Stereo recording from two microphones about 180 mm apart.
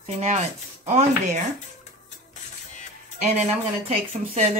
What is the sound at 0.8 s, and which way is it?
Speech, 40° right (ahead or behind).